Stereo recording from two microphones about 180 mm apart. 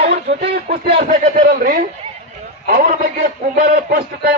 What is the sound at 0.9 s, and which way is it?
A man's voice, 45° right (ahead or behind).